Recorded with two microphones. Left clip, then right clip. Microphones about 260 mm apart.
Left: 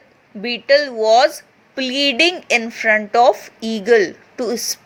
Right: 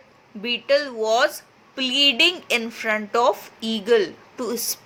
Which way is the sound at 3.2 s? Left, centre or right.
Centre.